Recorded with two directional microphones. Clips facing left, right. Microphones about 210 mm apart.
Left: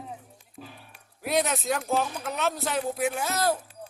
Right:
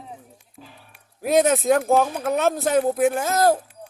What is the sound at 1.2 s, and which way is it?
Speech, 45° right (ahead or behind).